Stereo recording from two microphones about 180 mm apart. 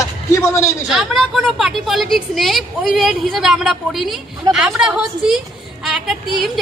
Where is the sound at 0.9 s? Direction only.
Centre (ahead or behind).